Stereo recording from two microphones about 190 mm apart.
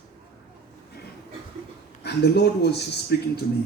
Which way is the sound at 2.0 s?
60° left (ahead or behind).